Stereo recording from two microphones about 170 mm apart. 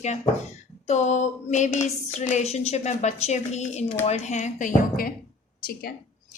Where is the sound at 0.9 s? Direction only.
40° left (ahead or behind).